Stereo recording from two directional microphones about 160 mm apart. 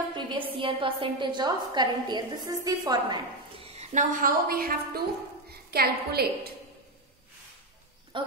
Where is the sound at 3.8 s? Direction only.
50° right (ahead or behind); by 5.0 s 65° right (ahead or behind).